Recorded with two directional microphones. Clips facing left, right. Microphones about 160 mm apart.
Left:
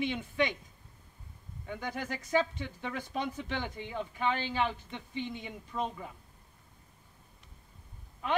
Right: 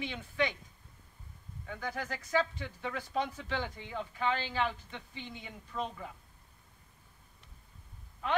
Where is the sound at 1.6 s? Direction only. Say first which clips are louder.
Left 1 dB; 20° left (ahead or behind).